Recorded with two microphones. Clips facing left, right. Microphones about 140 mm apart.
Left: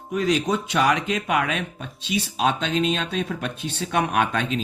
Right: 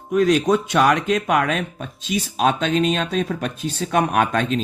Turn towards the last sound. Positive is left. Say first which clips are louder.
# right 3 dB
turn(degrees=-45)  # may be behind; listen again after turning